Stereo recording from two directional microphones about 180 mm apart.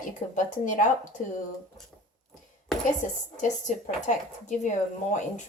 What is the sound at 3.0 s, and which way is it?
Speech, 45° left (ahead or behind).